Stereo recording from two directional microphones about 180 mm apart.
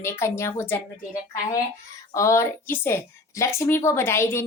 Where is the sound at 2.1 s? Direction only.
15° left (ahead or behind).